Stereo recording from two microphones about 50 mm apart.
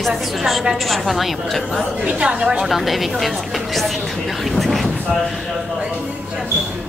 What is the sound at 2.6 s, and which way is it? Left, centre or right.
A woman's voice, centre.